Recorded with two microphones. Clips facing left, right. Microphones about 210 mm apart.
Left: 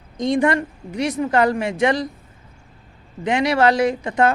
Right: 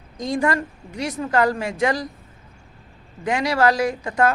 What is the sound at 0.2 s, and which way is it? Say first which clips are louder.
A woman's voice: left 4 dB; 20° left (ahead or behind).